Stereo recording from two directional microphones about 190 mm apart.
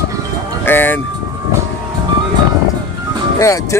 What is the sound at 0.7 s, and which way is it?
Speech, 10° left (ahead or behind).